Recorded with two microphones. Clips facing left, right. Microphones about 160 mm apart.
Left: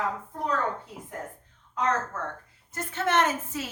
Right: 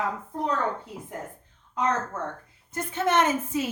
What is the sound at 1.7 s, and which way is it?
A woman's voice, 15° right (ahead or behind).